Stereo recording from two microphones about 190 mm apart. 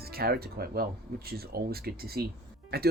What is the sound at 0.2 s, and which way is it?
Speech, 55° right (ahead or behind).